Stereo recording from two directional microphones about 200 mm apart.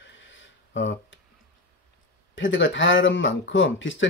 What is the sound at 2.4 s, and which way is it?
Speech, 70° left (ahead or behind).